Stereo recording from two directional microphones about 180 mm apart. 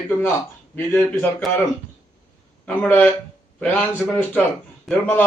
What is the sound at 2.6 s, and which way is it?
Speech, 10° left (ahead or behind).